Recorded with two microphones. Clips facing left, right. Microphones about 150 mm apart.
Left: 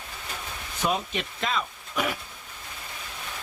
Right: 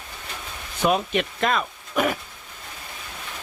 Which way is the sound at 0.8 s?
65° right (ahead or behind).